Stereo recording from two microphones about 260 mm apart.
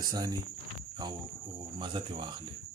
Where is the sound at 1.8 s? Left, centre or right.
Centre.